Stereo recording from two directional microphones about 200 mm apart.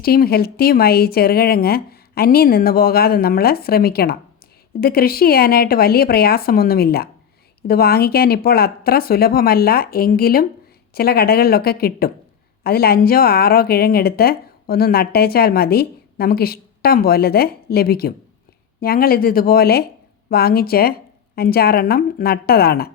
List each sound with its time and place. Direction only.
0.0 s speech: 50° left (ahead or behind)